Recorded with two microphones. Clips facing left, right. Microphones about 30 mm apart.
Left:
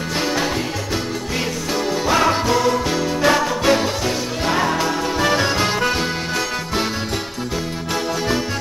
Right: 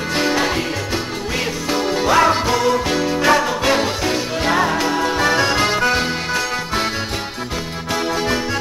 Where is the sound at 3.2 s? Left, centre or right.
Centre.